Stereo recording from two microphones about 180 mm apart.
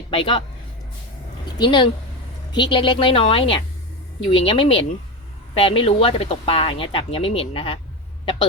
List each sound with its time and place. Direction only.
0.1 s a woman's voice: 30° left (ahead or behind)
1.5 s a woman's voice: 25° left (ahead or behind)